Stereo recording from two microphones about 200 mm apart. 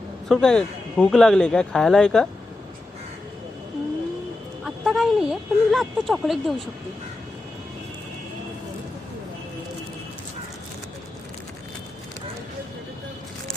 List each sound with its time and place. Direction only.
0.3 s speech: centre (ahead or behind)
4.6 s speech: centre (ahead or behind)